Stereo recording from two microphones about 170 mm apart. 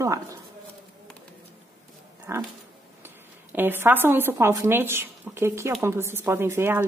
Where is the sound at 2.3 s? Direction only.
15° right (ahead or behind).